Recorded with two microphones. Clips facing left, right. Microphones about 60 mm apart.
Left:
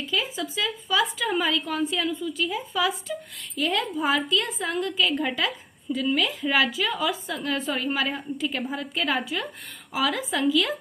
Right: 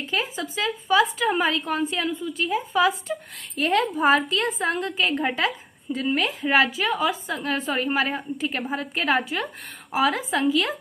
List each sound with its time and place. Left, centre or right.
0.0 s a woman's voice: right